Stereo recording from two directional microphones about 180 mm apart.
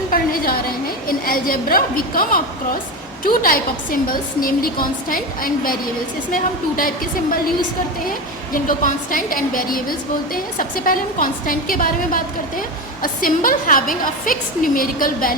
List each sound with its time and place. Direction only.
0.1 s a woman's voice: 55° left (ahead or behind)
8.5 s a woman's voice: 50° left (ahead or behind)